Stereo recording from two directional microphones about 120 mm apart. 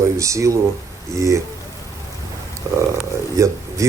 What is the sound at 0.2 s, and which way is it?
Speech, 25° right (ahead or behind).